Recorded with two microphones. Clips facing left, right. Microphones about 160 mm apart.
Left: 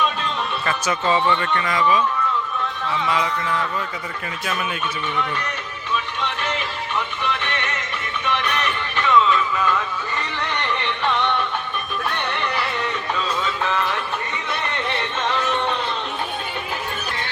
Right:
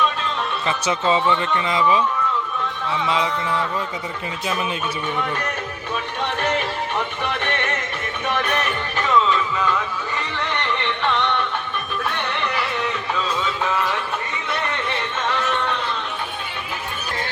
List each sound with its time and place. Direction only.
0.6 s speech: 20° right (ahead or behind)
5.9 s music: 50° right (ahead or behind)